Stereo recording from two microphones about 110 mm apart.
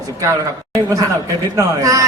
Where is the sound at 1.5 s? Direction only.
30° right (ahead or behind).